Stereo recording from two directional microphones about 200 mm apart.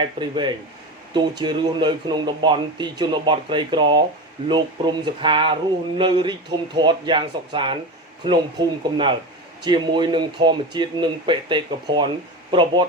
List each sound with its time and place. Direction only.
0.0 s speech: 25° right (ahead or behind)